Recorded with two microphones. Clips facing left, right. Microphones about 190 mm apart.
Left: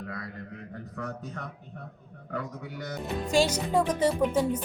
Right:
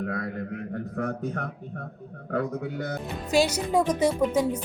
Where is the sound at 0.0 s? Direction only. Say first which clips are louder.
Right 8 dB; 55° right (ahead or behind).